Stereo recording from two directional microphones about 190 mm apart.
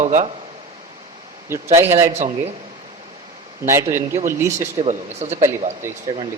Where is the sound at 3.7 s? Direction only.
15° right (ahead or behind).